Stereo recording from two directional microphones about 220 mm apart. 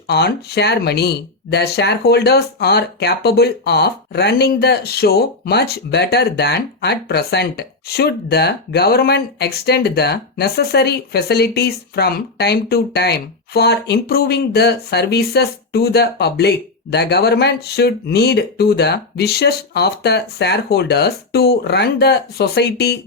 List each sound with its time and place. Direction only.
0.1 s speech: 50° left (ahead or behind)